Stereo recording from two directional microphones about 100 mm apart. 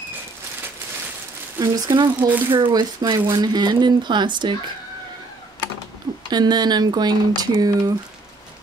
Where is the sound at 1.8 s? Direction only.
50° right (ahead or behind).